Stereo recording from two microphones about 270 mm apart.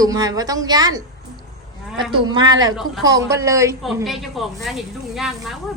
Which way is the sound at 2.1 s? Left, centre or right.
Centre.